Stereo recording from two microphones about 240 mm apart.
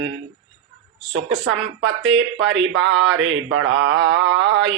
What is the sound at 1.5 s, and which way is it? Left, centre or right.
A man's voice, right.